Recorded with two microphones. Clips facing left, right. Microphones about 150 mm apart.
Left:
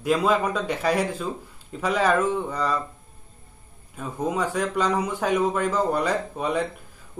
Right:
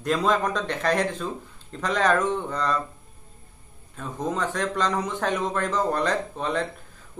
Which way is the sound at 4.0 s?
10° left (ahead or behind).